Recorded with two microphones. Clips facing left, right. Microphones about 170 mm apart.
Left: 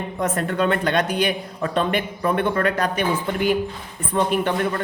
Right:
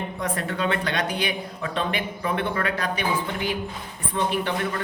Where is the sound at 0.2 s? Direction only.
50° left (ahead or behind).